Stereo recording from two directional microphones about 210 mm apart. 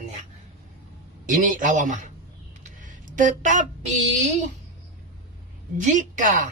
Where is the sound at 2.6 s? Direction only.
40° right (ahead or behind).